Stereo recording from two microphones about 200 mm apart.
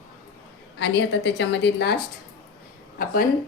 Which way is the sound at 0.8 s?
65° left (ahead or behind).